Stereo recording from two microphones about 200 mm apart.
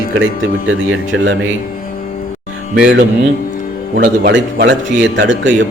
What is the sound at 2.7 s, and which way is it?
Speech, 60° right (ahead or behind).